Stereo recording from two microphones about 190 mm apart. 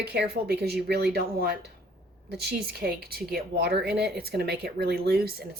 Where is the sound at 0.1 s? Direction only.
60° right (ahead or behind).